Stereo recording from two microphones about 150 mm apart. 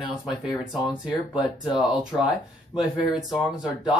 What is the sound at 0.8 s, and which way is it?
Speech, 5° right (ahead or behind).